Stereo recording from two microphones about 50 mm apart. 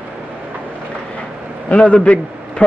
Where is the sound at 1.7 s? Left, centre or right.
Left.